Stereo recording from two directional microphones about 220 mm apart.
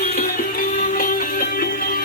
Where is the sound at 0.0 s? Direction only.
40° left (ahead or behind).